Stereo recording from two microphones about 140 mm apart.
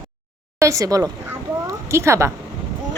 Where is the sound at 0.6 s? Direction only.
20° right (ahead or behind).